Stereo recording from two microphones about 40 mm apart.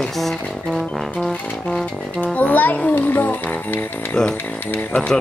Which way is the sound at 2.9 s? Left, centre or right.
Left.